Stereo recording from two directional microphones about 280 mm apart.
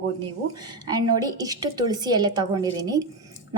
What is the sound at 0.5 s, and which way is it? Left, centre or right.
A woman's voice, centre.